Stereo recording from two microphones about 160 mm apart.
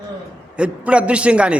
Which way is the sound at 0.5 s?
5° right (ahead or behind).